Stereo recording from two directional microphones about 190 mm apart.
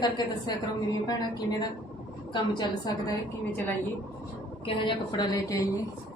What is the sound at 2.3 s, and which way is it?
Speech, 25° left (ahead or behind).